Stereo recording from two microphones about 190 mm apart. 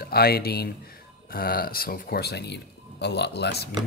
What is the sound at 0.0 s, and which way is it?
Speech, 55° left (ahead or behind).